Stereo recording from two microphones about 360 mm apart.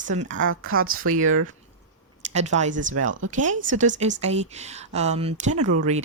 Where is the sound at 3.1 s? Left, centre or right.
Right.